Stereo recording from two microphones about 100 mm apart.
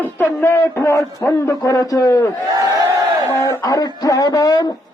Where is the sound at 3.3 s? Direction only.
30° left (ahead or behind).